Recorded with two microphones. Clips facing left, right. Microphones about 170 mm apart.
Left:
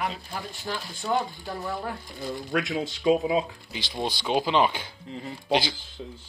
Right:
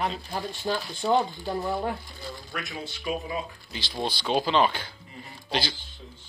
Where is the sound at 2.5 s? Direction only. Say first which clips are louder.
Left 10 dB; 90° left.